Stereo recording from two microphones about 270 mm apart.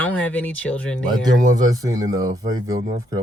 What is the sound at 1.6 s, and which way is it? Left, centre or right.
Speech, centre.